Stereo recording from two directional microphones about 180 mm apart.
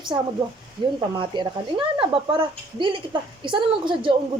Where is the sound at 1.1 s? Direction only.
25° right (ahead or behind).